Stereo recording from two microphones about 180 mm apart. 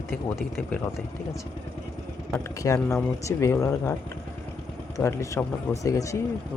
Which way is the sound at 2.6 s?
15° left (ahead or behind).